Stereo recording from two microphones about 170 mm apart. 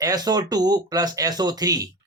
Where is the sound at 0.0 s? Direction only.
20° right (ahead or behind).